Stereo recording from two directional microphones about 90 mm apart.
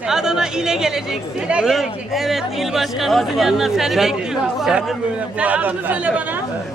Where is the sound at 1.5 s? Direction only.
5° right (ahead or behind).